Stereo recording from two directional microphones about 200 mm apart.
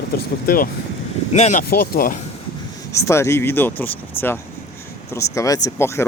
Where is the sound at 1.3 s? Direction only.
35° left (ahead or behind).